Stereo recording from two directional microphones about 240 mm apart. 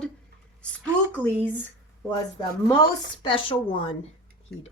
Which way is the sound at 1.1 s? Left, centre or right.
Centre.